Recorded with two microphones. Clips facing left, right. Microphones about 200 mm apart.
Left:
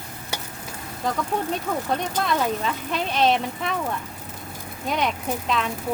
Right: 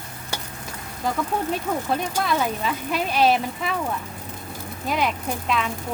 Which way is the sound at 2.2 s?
Centre (ahead or behind).